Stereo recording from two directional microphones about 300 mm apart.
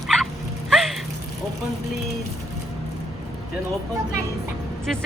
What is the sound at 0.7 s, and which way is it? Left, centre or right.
Raindrop, centre.